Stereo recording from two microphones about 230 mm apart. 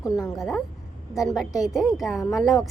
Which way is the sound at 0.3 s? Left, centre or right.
Centre.